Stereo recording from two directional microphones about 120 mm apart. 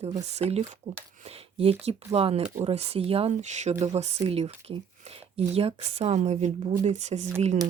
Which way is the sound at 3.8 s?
65° right (ahead or behind).